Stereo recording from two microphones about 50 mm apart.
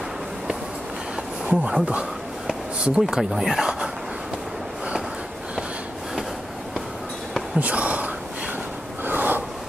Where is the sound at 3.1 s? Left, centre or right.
Centre.